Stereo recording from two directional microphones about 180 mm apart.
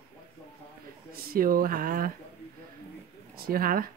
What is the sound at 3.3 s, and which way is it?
Speech, 55° right (ahead or behind).